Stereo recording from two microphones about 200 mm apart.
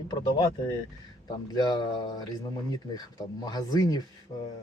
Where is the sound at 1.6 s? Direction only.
20° left (ahead or behind).